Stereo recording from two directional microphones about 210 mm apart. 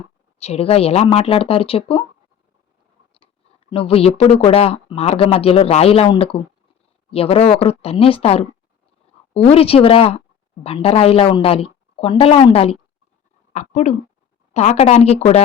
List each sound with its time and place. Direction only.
0.3 s speech: 30° left (ahead or behind)
3.7 s a woman's voice: 25° left (ahead or behind)